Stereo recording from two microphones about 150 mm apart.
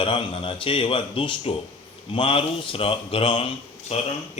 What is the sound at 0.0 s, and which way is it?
Speech, 35° left (ahead or behind).